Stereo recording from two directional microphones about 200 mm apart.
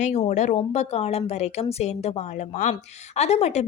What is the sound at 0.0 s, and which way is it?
A woman's voice, 35° left (ahead or behind).